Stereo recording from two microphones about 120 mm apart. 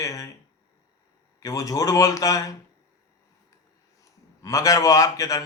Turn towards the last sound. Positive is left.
turn(degrees=30)  # may be behind; listen again after turning